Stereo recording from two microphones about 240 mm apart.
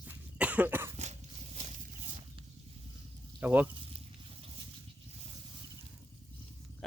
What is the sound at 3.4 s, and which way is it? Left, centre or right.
Speech, centre.